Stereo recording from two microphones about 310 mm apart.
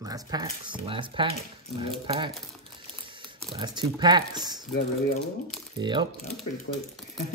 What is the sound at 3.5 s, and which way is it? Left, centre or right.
Speech, centre.